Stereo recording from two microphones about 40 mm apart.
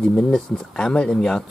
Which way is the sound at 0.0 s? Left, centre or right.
Left.